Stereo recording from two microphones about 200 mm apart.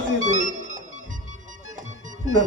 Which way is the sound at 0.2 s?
40° right (ahead or behind).